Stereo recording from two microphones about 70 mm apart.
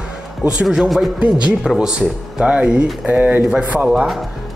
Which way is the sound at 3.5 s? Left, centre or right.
Centre.